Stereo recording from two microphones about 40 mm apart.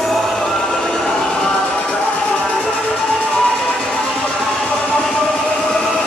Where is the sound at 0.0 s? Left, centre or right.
Centre.